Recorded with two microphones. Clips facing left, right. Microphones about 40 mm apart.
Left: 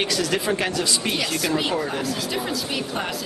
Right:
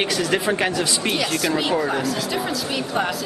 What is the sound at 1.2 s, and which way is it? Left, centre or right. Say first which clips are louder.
Speech: right 2 dB; centre.